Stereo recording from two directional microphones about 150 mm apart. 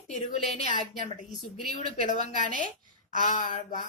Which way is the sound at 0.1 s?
45° left (ahead or behind).